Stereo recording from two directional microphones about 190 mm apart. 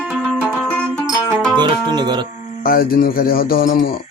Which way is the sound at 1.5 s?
25° right (ahead or behind).